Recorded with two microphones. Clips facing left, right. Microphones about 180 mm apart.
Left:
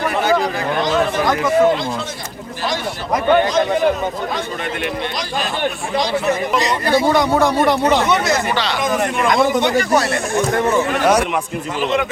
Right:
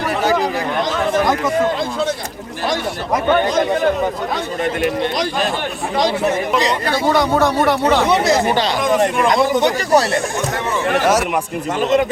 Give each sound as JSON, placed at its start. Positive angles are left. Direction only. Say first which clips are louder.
{"t": 7.2, "sound": "speech", "louder": "even", "side_deg": 10}
{"t": 8.0, "sound": "speech", "louder": "right 3 dB", "side_deg": -30}
{"t": 11.0, "sound": "a man's voice", "louder": "left 1 dB", "side_deg": -5}